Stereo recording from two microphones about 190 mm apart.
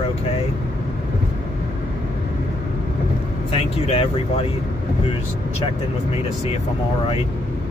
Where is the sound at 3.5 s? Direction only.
30° left (ahead or behind).